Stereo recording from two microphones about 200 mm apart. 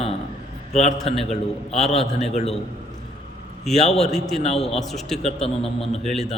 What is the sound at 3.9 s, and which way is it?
Speech, centre (ahead or behind).